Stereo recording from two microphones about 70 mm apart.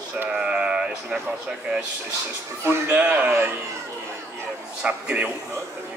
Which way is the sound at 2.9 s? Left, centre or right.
Right.